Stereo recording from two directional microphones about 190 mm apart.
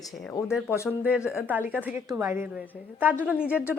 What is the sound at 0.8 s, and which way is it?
A woman's voice, 5° right (ahead or behind).